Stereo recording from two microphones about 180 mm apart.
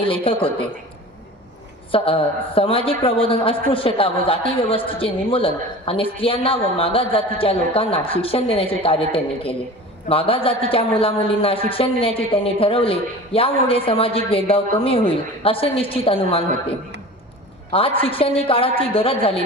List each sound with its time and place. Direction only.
0.0 s a woman's voice: 30° left (ahead or behind)
1.9 s a woman's voice: 30° left (ahead or behind)
17.7 s a woman's voice: 30° left (ahead or behind)